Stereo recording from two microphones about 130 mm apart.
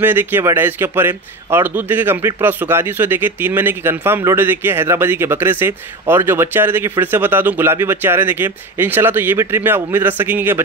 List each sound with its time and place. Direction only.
0.0 s a man's voice: 15° right (ahead or behind)